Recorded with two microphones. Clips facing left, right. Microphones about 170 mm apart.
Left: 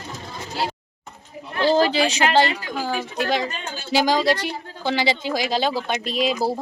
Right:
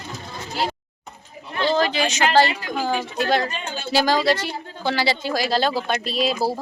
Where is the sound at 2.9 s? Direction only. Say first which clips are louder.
Right 1 dB; 15° left (ahead or behind).